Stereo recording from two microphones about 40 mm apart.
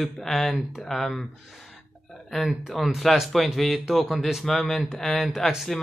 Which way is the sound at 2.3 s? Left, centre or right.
Centre.